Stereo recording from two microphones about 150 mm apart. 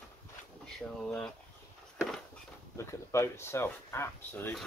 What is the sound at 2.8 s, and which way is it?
Speech, 20° left (ahead or behind).